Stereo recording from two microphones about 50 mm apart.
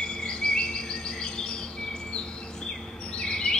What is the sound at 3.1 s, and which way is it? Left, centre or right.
Bird vocalization, centre.